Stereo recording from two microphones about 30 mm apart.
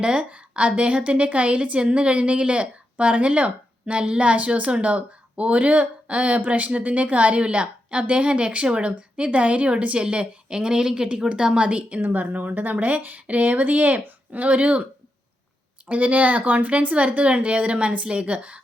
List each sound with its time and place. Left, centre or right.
0.0 s a woman's voice: right
3.9 s a woman's voice: right
4.7 s a woman's voice: right
12.0 s speech: right
12.7 s a woman's voice: right
13.0 s speech: right
13.2 s speech: right
15.9 s a woman's voice: right